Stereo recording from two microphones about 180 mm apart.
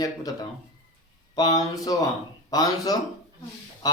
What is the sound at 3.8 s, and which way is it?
Goose, 20° left (ahead or behind).